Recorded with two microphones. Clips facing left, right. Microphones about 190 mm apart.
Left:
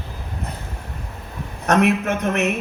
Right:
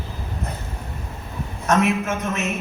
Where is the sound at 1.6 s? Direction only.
65° left (ahead or behind).